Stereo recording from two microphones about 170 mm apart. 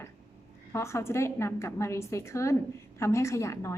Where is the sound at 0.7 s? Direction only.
15° left (ahead or behind).